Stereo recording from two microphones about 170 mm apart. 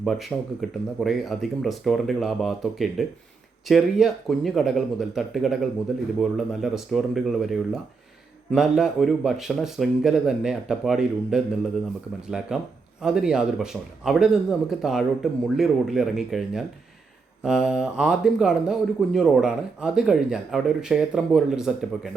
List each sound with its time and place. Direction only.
0.0 s speech: centre (ahead or behind)